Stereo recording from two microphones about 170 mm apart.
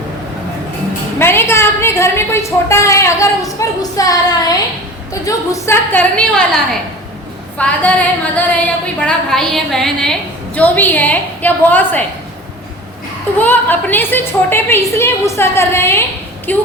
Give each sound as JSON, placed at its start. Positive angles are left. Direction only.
{"t": 1.2, "sound": "a woman's voice", "side_deg": 15}
{"t": 7.6, "sound": "a woman's voice", "side_deg": 10}
{"t": 13.4, "sound": "a woman's voice", "side_deg": 10}